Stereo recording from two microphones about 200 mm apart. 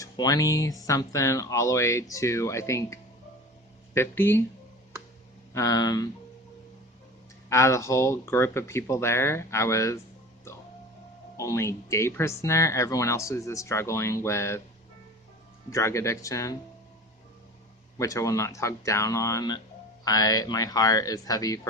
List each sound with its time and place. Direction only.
0.0 s speech: 20° left (ahead or behind)
5.5 s speech: 20° left (ahead or behind)
7.5 s speech: 15° left (ahead or behind)
11.3 s speech: 15° left (ahead or behind)
15.7 s speech: 15° left (ahead or behind)
17.9 s speech: 15° left (ahead or behind)